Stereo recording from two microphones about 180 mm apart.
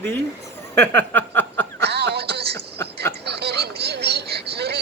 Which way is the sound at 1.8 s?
65° right (ahead or behind).